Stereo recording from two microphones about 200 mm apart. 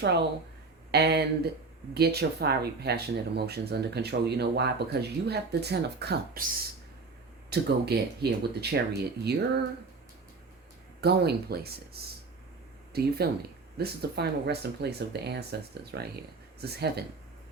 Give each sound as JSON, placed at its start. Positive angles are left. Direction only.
{"t": 0.9, "sound": "speech", "side_deg": -55}
{"t": 7.5, "sound": "speech", "side_deg": -55}
{"t": 11.0, "sound": "speech", "side_deg": -55}